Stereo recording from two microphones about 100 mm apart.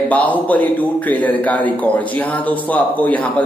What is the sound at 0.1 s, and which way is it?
A man's voice, 15° left (ahead or behind).